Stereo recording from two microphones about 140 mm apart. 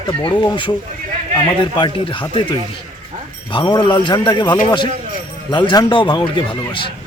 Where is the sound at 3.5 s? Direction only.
35° left (ahead or behind).